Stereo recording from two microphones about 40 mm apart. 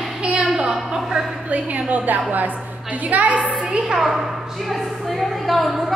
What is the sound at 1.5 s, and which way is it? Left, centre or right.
A woman's voice, right.